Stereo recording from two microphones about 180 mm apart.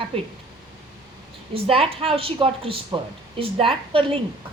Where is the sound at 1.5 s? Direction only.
30° right (ahead or behind).